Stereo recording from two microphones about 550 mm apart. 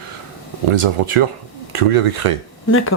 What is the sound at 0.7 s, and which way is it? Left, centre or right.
Speech, right.